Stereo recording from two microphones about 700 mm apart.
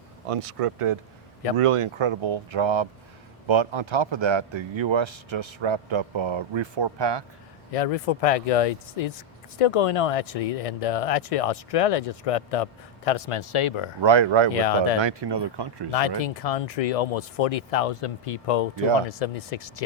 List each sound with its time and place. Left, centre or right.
0.3 s speech: right
7.7 s speech: left
14.0 s speech: right
14.5 s speech: left
15.0 s speech: right
15.9 s speech: left